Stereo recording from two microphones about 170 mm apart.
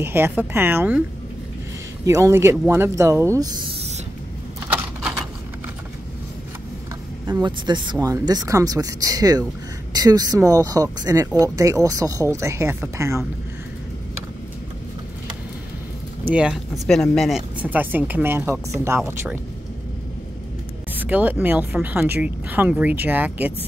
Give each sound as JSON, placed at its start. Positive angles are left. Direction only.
{"t": 0.0, "sound": "speech", "side_deg": -15}
{"t": 2.0, "sound": "speech", "side_deg": -15}
{"t": 4.6, "sound": "typewriter", "side_deg": -5}
{"t": 7.2, "sound": "speech", "side_deg": -25}
{"t": 16.3, "sound": "speech", "side_deg": -5}
{"t": 20.9, "sound": "speech", "side_deg": -10}